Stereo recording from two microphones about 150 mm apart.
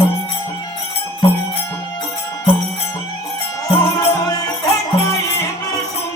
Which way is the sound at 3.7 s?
25° left (ahead or behind).